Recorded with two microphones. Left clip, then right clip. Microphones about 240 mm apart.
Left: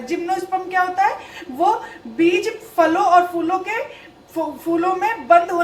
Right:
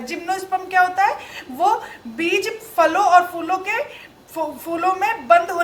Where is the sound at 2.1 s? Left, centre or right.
Right.